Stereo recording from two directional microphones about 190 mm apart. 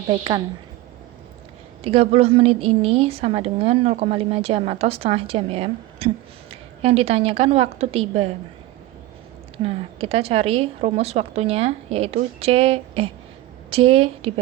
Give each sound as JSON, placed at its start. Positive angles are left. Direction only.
{"t": 0.1, "sound": "a woman's voice", "side_deg": -20}
{"t": 1.8, "sound": "a woman's voice", "side_deg": -30}
{"t": 9.6, "sound": "a woman's voice", "side_deg": -30}